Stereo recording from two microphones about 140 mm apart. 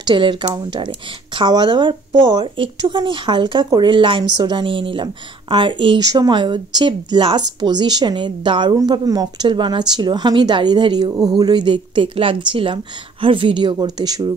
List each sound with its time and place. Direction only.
0.0 s speech: 35° right (ahead or behind)